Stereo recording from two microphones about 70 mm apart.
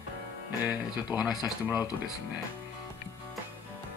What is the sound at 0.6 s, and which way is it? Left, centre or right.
Speech, right.